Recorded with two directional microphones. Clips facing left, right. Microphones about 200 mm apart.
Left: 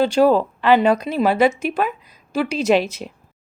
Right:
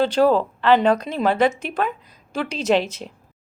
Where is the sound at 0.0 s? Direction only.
10° left (ahead or behind).